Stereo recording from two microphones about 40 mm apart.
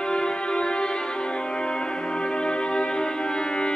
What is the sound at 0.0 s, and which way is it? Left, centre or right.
Music, left.